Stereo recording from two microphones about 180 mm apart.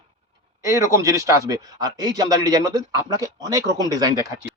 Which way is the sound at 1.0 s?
20° right (ahead or behind).